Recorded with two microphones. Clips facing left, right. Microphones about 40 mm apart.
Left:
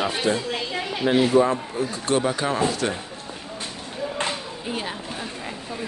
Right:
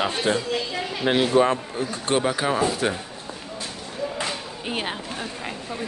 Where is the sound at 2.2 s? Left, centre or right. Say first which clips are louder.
Even; centre.